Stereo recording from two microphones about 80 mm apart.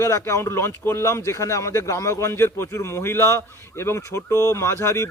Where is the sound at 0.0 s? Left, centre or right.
Left.